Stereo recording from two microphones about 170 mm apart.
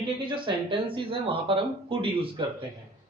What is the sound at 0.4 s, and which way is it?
Speech, 30° right (ahead or behind).